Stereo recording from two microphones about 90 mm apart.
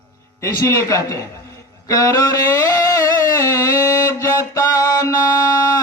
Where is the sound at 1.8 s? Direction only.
35° left (ahead or behind).